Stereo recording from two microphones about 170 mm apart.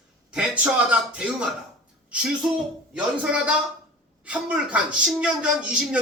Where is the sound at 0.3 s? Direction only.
5° right (ahead or behind).